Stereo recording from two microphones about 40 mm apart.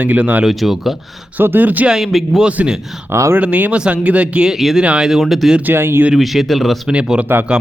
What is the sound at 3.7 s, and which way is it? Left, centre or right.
Speech, right.